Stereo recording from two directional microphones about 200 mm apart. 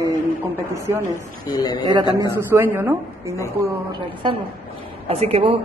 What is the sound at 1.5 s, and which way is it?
Speech, 20° left (ahead or behind).